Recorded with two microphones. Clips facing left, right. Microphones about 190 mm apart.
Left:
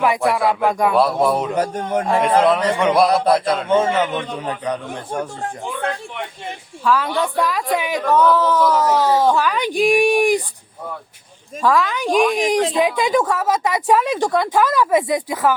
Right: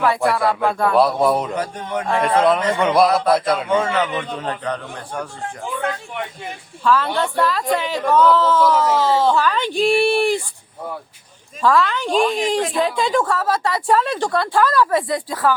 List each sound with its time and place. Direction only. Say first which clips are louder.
0.2 s a man's voice: even; centre (ahead or behind)
0.6 s a woman's voice: left 1 dB; 15° left (ahead or behind)
0.9 s a man's voice: right 1 dB; centre (ahead or behind)
1.5 s a man's voice: left 4 dB; 45° left (ahead or behind)
2.4 s a man's voice: left 1 dB; centre (ahead or behind)
3.8 s a man's voice: left 2 dB; 20° left (ahead or behind)
4.0 s a man's voice: left 1 dB; centre (ahead or behind)
4.4 s a woman's voice: left 1 dB; 15° left (ahead or behind)
6.8 s a woman's voice: even; 10° left (ahead or behind)
11.6 s a woman's voice: even; 15° left (ahead or behind)